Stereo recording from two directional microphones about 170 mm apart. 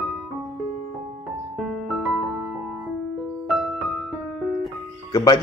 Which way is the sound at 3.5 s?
Centre (ahead or behind).